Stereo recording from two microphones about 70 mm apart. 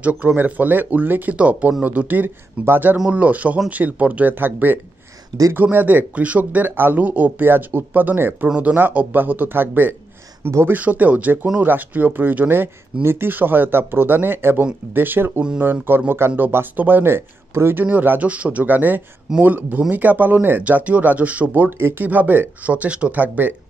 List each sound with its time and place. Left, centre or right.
0.0 s speech: right